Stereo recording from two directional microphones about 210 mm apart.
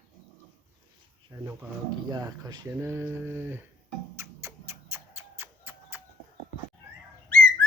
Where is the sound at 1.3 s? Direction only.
15° right (ahead or behind).